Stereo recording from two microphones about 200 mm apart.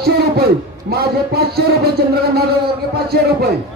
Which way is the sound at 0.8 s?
50° right (ahead or behind).